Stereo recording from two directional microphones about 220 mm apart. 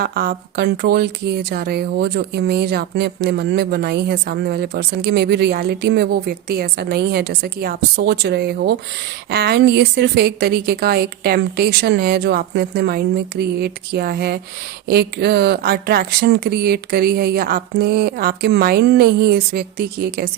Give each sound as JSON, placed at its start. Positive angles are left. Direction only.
{"t": 0.0, "sound": "speech", "side_deg": -45}